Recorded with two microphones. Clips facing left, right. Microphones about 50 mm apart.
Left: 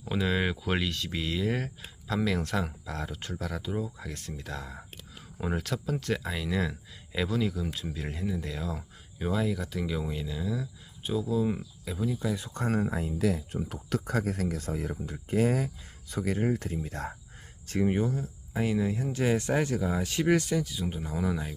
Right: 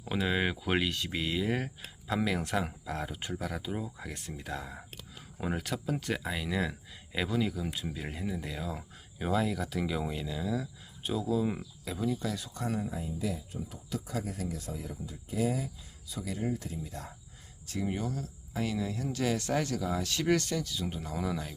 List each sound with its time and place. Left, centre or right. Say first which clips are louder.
0.0 s speech: left 2 dB; centre
12.3 s speech: left 4 dB; left
12.5 s speech: left 5 dB; left
13.0 s speech: left 6 dB; left
17.7 s speech: left 7 dB; left; by 21.5 s centre